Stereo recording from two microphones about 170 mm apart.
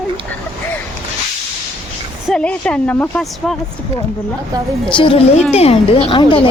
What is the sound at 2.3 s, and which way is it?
A woman's voice, 5° left (ahead or behind).